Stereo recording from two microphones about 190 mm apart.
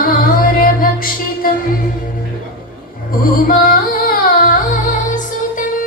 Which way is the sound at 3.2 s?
50° left (ahead or behind).